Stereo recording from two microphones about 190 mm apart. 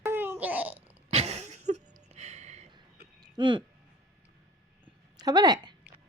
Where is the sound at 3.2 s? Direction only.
25° right (ahead or behind).